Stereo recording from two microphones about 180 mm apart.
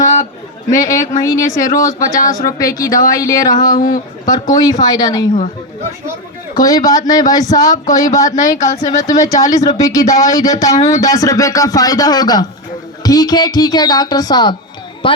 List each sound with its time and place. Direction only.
0.0 s a sound: 40° left (ahead or behind)
0.8 s speech: 20° left (ahead or behind)
3.8 s speech: 45° left (ahead or behind)
4.3 s speech: 20° left (ahead or behind)
6.6 s speech: 20° left (ahead or behind)